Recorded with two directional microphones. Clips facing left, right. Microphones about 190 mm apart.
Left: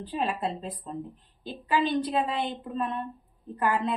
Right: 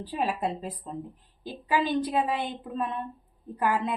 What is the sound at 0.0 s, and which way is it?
A woman's voice, 10° right (ahead or behind).